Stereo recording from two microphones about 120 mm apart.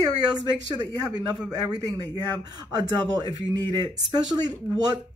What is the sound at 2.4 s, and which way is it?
Speech, 35° right (ahead or behind).